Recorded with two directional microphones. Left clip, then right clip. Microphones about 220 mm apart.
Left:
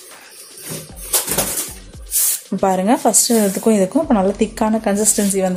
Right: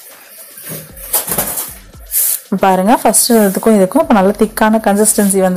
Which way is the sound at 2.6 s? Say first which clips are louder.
Right 5 dB; 15° right (ahead or behind).